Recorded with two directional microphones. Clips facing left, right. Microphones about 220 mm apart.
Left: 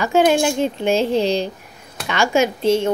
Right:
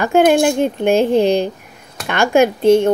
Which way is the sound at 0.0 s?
55° right (ahead or behind).